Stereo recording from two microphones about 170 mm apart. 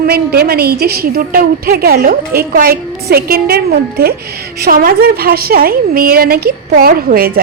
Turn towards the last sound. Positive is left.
turn(degrees=-60)  # may be behind; listen again after turning